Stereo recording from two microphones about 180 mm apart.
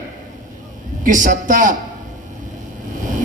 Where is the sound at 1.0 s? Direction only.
45° right (ahead or behind).